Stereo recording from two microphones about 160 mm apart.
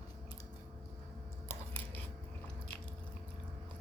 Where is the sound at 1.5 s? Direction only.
15° left (ahead or behind).